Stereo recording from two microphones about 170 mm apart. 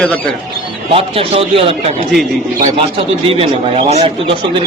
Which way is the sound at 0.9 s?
35° right (ahead or behind).